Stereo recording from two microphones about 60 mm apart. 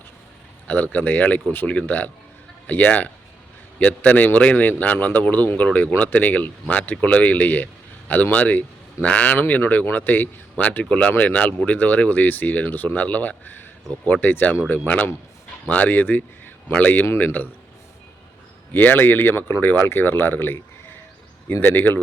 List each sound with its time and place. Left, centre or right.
0.7 s speech: left
18.7 s speech: left
21.6 s speech: left